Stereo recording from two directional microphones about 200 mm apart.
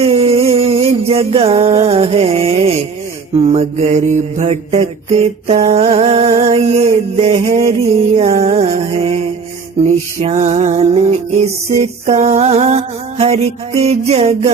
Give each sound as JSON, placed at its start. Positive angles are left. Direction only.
{"t": 0.0, "sound": "music", "side_deg": -30}
{"t": 3.5, "sound": "mantra", "side_deg": -35}
{"t": 9.8, "sound": "mantra", "side_deg": -35}